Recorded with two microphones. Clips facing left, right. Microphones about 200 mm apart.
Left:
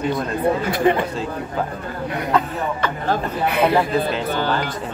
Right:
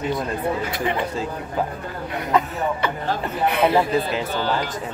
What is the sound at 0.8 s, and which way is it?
Speech, 50° left (ahead or behind).